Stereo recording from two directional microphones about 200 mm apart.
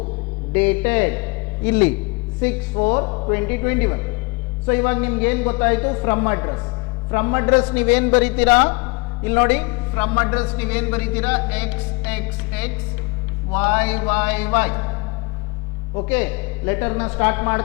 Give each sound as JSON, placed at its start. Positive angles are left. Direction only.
{"t": 0.5, "sound": "a man's voice", "side_deg": 10}
{"t": 3.1, "sound": "a woman's voice", "side_deg": 25}
{"t": 3.3, "sound": "a man's voice", "side_deg": 15}
{"t": 16.0, "sound": "a man's voice", "side_deg": 10}